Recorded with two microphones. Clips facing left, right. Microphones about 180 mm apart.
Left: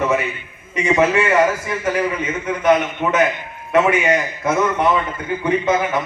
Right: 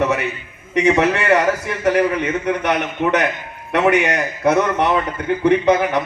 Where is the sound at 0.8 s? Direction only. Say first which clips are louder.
Right 1 dB; 65° right (ahead or behind).